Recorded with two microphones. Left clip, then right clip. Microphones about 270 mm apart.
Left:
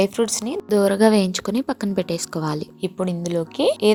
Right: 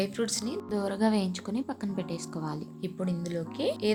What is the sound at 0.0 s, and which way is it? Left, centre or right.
A woman's voice, centre.